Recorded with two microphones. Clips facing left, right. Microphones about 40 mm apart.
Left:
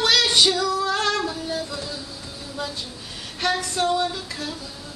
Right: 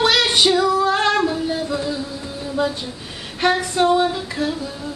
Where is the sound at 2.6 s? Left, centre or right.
Centre.